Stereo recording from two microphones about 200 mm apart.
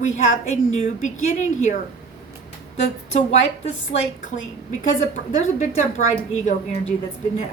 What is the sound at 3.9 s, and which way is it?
A woman's voice, 35° left (ahead or behind).